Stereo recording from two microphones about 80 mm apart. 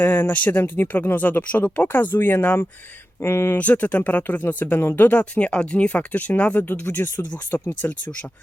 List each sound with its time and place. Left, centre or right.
0.0 s speech: left
3.6 s speech: centre